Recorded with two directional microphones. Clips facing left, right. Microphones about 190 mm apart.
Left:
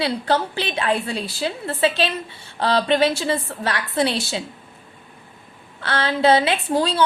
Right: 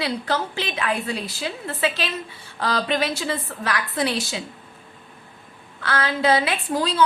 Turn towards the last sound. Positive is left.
turn(degrees=30)  # may be behind; listen again after turning